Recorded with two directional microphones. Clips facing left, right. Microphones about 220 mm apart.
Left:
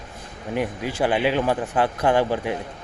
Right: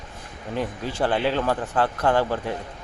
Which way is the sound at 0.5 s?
15° left (ahead or behind).